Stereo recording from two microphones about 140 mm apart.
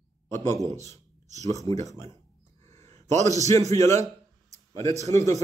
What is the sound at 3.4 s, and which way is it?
Speech, 55° right (ahead or behind).